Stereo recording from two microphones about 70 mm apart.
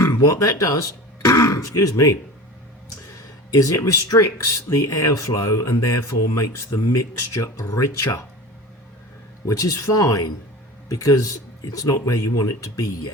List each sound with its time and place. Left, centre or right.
0.0 s speech: left
3.5 s speech: left
9.5 s speech: left